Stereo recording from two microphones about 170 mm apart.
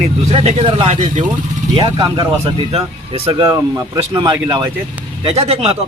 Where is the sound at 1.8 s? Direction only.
25° right (ahead or behind).